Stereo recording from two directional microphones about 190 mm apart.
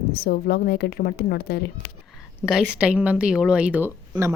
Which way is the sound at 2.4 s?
5° right (ahead or behind).